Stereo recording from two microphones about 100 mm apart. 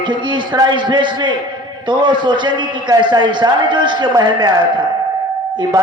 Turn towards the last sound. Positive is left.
turn(degrees=-40)  # may be behind; listen again after turning